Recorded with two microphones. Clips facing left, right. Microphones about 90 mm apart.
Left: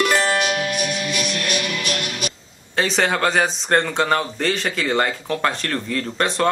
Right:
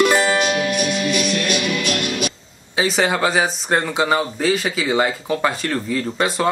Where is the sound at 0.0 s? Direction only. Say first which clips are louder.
Right 3 dB; 15° right (ahead or behind).